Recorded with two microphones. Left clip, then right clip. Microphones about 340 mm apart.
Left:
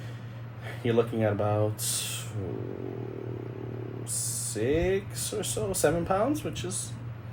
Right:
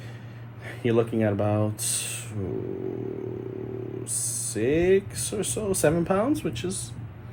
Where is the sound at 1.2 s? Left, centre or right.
Right.